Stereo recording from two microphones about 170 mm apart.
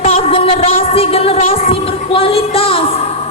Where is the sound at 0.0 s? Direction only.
35° left (ahead or behind).